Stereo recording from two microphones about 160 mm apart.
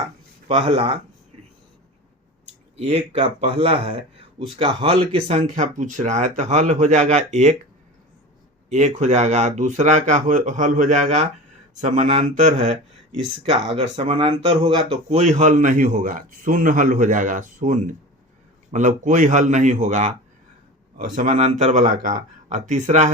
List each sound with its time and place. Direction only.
0.4 s speech: 30° right (ahead or behind)
2.7 s speech: 45° right (ahead or behind)
8.7 s speech: 45° right (ahead or behind)